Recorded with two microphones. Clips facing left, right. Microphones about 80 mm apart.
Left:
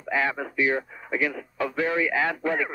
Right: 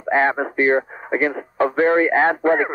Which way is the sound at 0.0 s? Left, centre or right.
Right.